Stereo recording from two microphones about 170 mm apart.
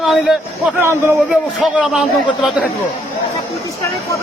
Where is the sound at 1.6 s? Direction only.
5° right (ahead or behind).